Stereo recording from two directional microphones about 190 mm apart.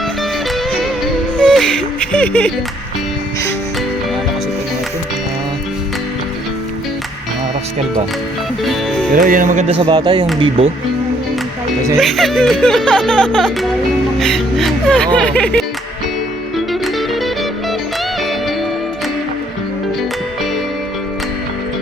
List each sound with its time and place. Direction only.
1.4 s music: 5° left (ahead or behind)
8.6 s music: centre (ahead or behind)
9.1 s speech: 45° right (ahead or behind)
9.8 s speech: 20° right (ahead or behind)
11.9 s speech: centre (ahead or behind)